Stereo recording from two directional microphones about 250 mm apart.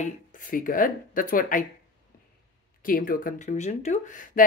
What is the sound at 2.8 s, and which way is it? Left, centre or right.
Speech, left.